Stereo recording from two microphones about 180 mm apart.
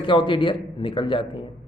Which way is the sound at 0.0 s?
25° left (ahead or behind).